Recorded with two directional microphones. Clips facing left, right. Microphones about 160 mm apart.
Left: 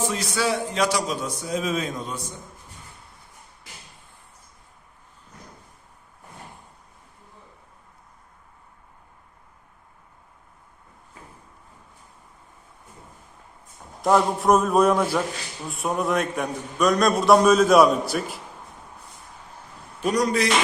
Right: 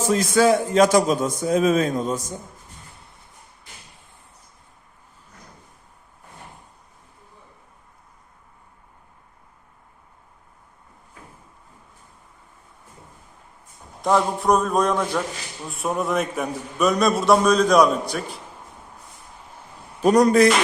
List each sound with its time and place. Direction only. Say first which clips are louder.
0.0 s a man's voice: right 7 dB; 45° right (ahead or behind)
14.0 s a man's voice: left 1 dB; centre (ahead or behind)
20.1 s a man's voice: right 8 dB; 50° right (ahead or behind)